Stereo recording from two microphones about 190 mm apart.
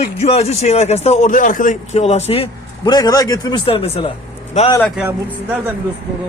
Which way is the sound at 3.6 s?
30° left (ahead or behind).